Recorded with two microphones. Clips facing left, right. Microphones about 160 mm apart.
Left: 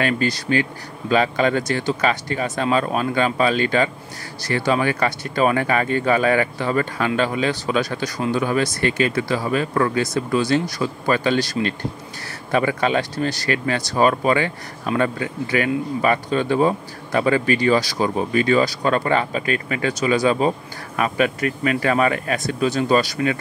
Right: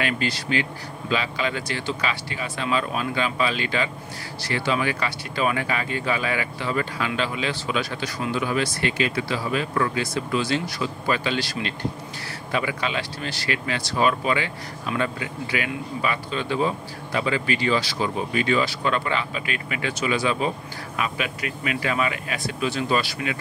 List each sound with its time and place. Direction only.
0.0 s speech: 45° left (ahead or behind)